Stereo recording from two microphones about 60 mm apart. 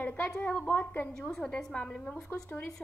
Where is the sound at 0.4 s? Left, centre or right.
Left.